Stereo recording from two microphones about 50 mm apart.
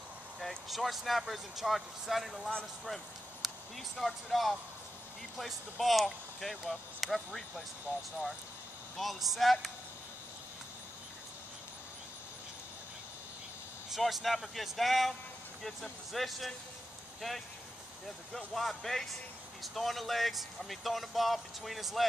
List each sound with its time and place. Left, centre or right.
0.4 s speech: centre
7.9 s speech: right
8.9 s speech: centre
13.8 s speech: centre
18.0 s speech: centre